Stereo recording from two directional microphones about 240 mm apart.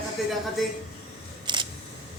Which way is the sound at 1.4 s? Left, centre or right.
Centre.